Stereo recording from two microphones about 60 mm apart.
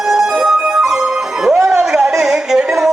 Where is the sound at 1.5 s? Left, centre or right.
Centre.